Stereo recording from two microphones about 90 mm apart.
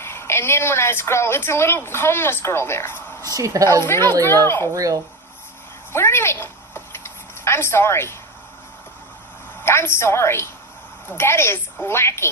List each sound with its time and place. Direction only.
0.0 s a woman's voice: 25° left (ahead or behind)
3.3 s a woman's voice: 45° right (ahead or behind)
3.7 s a woman's voice: 25° left (ahead or behind)
4.7 s speech: 40° right (ahead or behind)
5.9 s a sound: 25° left (ahead or behind)
9.6 s a woman's voice: 30° left (ahead or behind)